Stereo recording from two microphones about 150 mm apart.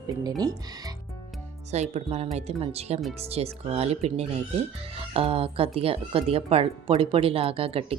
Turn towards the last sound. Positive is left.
turn(degrees=-40)  # may be behind; listen again after turning